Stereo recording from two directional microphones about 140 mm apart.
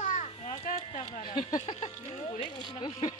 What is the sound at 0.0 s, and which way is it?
Children playing, 60° left (ahead or behind).